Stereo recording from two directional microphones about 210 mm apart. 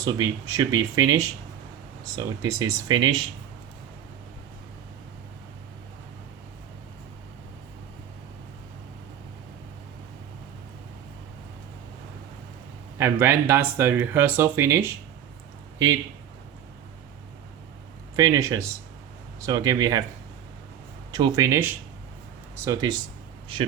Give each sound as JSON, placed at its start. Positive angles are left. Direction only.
{"t": 0.0, "sound": "speech", "side_deg": -15}
{"t": 13.0, "sound": "speech", "side_deg": -10}
{"t": 18.2, "sound": "speech", "side_deg": -15}
{"t": 21.1, "sound": "speech", "side_deg": -20}